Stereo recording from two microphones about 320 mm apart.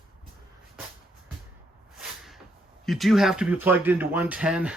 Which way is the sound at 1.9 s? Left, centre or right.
Centre.